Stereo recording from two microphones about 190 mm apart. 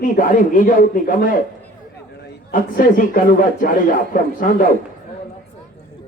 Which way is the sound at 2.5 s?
45° left (ahead or behind).